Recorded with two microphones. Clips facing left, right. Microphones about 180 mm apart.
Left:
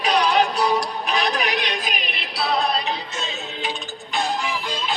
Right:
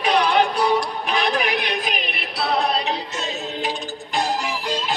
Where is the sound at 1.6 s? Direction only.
55° right (ahead or behind).